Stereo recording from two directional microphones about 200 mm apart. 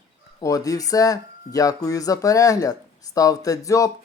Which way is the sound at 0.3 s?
15° left (ahead or behind).